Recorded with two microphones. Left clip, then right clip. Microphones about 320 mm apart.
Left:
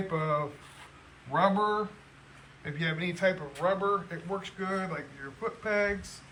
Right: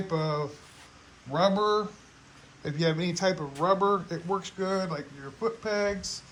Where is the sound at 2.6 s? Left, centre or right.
Centre.